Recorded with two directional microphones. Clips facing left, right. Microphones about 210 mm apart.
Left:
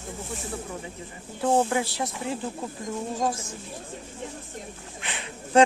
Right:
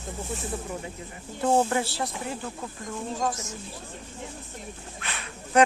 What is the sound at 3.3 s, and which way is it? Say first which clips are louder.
Speech: left 2 dB; 30° left (ahead or behind).